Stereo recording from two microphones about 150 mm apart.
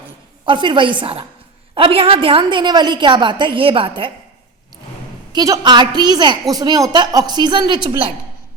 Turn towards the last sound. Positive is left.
turn(degrees=-30)  # may be behind; listen again after turning